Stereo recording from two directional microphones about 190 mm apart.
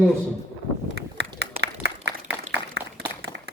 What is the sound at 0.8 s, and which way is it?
Run, 65° right (ahead or behind).